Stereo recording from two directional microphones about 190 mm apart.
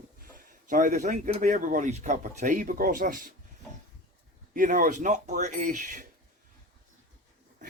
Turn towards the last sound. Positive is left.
turn(degrees=-40)  # may be behind; listen again after turning